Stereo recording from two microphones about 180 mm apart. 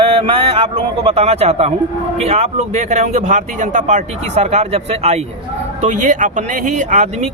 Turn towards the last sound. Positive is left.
turn(degrees=-40)  # may be behind; listen again after turning